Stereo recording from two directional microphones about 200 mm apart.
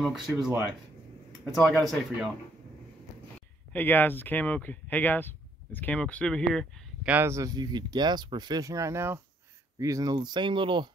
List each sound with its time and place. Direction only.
0.0 s speech: centre (ahead or behind)
3.7 s speech: 10° left (ahead or behind); by 10.9 s 25° right (ahead or behind)